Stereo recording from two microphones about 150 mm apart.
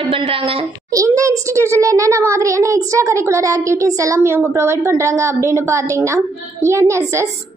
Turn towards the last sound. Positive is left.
turn(degrees=-20)  # may be behind; listen again after turning